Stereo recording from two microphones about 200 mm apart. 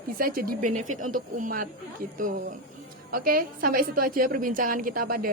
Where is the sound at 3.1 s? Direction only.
45° right (ahead or behind).